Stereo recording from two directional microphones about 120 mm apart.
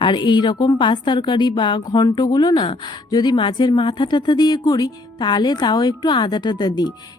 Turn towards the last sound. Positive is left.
turn(degrees=35)  # may be behind; listen again after turning